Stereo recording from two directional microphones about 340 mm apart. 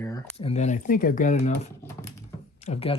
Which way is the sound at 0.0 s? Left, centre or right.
Centre.